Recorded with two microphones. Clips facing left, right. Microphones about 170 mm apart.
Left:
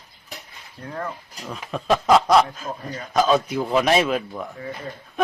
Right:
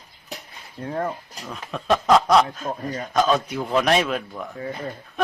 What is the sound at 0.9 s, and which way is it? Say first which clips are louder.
Speech: right 4 dB; 30° right (ahead or behind).